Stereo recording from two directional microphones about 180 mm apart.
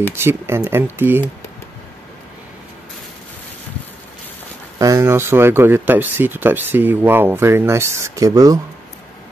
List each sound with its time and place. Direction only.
0.1 s speech: 15° right (ahead or behind)
4.7 s speech: 15° right (ahead or behind)